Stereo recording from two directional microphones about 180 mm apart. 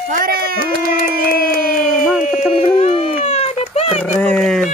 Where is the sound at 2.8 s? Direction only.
35° left (ahead or behind).